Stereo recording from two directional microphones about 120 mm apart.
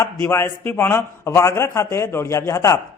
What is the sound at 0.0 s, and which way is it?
A man's voice, 20° left (ahead or behind).